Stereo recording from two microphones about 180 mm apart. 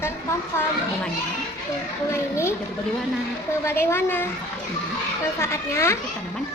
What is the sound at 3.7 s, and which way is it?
Speech, 15° left (ahead or behind).